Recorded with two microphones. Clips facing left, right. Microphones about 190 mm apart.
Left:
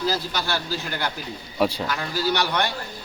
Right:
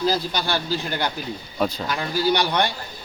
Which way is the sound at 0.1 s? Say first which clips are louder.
Right 3 dB; 15° right (ahead or behind).